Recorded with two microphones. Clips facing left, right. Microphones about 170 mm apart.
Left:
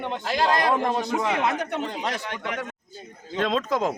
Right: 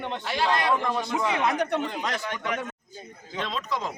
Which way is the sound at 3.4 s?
50° left (ahead or behind).